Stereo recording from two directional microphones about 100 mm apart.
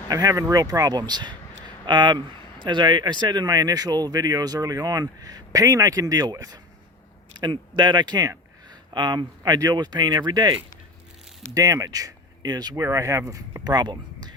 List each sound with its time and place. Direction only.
0.1 s speech: 35° right (ahead or behind)
7.3 s speech: 50° right (ahead or behind)